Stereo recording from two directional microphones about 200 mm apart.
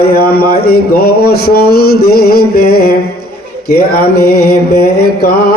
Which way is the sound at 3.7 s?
50° left (ahead or behind).